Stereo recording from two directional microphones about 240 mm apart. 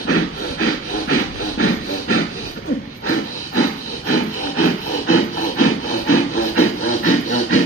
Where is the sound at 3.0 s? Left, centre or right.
Left.